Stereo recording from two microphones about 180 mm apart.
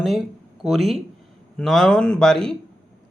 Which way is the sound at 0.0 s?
Centre (ahead or behind).